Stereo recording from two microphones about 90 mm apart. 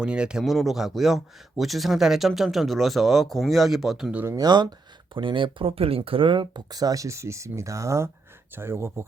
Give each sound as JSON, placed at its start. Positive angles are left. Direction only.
{"t": 0.0, "sound": "speech", "side_deg": -10}
{"t": 4.1, "sound": "speech", "side_deg": -20}
{"t": 4.4, "sound": "speech", "side_deg": -50}
{"t": 5.1, "sound": "speech", "side_deg": -70}